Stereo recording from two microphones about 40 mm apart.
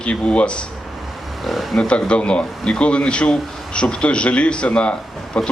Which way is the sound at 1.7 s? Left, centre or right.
Left.